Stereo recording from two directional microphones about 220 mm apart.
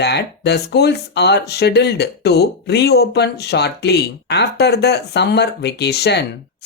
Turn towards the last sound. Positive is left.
turn(degrees=50)  # may be behind; listen again after turning